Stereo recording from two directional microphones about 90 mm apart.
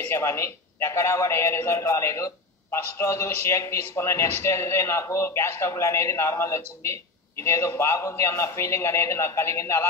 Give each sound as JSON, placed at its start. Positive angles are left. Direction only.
{"t": 0.1, "sound": "a man's voice", "side_deg": 30}